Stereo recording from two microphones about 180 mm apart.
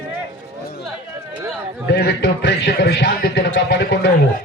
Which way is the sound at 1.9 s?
65° left (ahead or behind).